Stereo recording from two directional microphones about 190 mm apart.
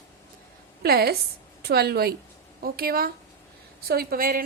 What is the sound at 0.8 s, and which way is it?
A woman's voice, 55° right (ahead or behind).